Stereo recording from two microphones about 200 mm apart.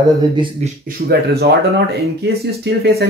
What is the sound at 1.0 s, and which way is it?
Speech, 50° right (ahead or behind).